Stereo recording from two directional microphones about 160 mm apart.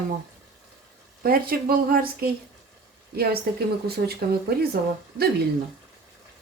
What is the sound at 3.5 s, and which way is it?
Speech, 70° right (ahead or behind).